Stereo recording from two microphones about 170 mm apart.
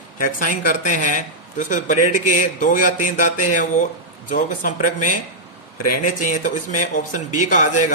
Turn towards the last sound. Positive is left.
turn(degrees=50)  # may be behind; listen again after turning